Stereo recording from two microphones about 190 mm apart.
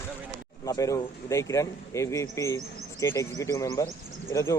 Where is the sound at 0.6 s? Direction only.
15° left (ahead or behind).